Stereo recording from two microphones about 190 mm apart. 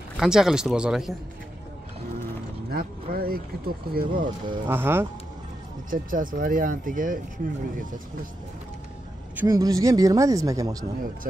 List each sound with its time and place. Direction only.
0.2 s speech: 5° right (ahead or behind)
2.7 s speech: 50° right (ahead or behind)
4.1 s speech: 25° right (ahead or behind)
4.6 s speech: 10° right (ahead or behind)
5.9 s speech: 45° right (ahead or behind)
9.4 s speech: 20° right (ahead or behind)